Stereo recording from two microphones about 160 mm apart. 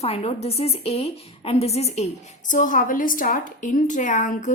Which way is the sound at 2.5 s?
55° left (ahead or behind).